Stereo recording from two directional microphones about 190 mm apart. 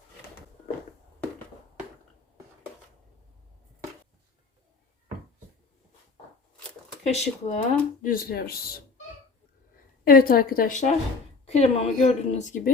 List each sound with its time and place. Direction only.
7.0 s speech: 35° left (ahead or behind); by 8.8 s 50° left (ahead or behind)
10.0 s speech: 50° left (ahead or behind)